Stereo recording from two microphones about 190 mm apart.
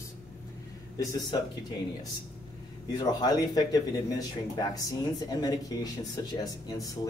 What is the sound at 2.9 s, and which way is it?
Speech, 20° left (ahead or behind).